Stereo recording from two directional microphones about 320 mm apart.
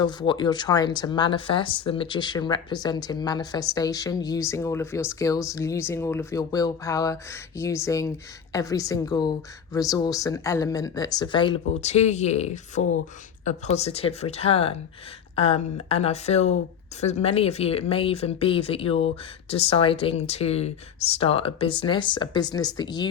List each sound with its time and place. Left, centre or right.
0.0 s speech: centre